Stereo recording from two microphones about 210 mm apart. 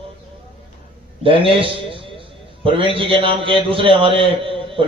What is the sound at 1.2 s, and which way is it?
A man's voice, 25° right (ahead or behind).